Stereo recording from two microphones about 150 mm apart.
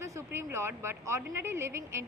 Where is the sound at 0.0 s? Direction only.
20° right (ahead or behind).